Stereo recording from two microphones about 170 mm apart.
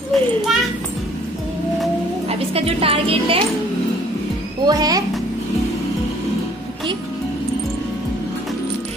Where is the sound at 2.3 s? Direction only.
35° right (ahead or behind).